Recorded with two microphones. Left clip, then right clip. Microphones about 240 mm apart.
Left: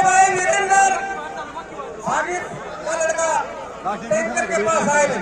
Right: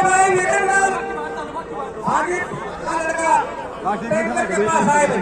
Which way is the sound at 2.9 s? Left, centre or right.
Left.